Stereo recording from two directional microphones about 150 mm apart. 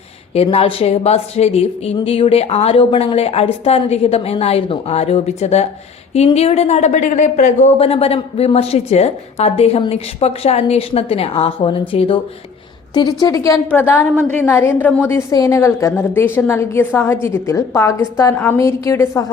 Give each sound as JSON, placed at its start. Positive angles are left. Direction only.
{"t": 0.3, "sound": "a woman's voice", "side_deg": 40}
{"t": 13.7, "sound": "a woman's voice", "side_deg": 10}
{"t": 15.3, "sound": "a woman's voice", "side_deg": 20}